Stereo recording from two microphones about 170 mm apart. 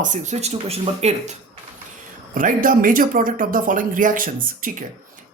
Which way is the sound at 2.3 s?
50° right (ahead or behind).